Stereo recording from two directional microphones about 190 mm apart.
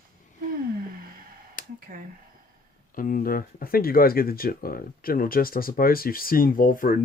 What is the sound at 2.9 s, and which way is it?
Speech, 45° left (ahead or behind).